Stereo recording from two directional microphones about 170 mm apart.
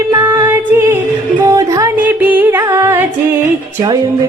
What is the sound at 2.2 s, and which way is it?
Speech, 10° right (ahead or behind).